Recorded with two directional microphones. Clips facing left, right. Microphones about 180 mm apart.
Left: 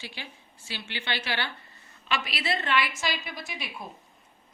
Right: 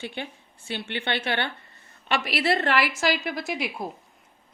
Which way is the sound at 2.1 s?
65° right (ahead or behind).